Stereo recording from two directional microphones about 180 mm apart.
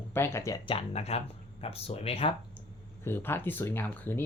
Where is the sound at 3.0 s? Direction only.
10° left (ahead or behind).